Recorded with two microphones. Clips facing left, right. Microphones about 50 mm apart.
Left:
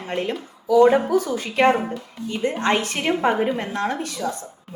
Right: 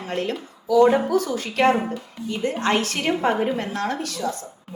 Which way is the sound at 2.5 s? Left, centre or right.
Centre.